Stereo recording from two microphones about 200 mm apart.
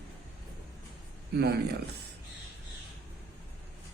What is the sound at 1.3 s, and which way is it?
Speech, 55° right (ahead or behind).